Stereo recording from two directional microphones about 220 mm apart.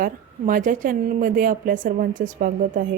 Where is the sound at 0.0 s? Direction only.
40° right (ahead or behind).